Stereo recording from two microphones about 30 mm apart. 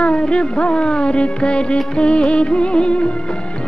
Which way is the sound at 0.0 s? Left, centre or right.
Left.